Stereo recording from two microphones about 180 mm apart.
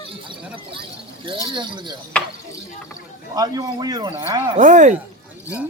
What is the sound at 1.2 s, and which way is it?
Speech, 30° right (ahead or behind).